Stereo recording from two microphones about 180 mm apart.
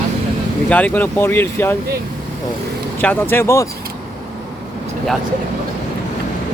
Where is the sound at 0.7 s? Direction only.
10° left (ahead or behind).